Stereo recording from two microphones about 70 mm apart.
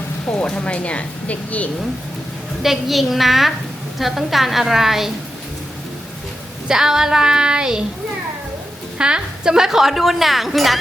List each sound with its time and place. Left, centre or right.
0.4 s speech: centre
2.6 s speech: centre
6.7 s child singing: centre
9.0 s speech: centre